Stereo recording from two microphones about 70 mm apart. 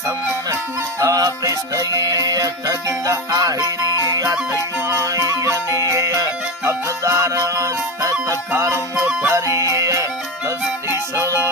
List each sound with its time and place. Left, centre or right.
0.9 s music: right
11.2 s music: right